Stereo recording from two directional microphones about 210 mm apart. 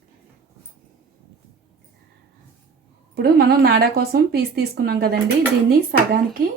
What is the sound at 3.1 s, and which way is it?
Speech, 50° right (ahead or behind).